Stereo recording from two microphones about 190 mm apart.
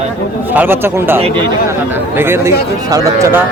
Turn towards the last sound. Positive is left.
turn(degrees=-15)  # may be behind; listen again after turning